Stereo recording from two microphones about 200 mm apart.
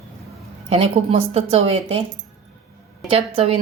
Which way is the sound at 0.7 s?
30° right (ahead or behind).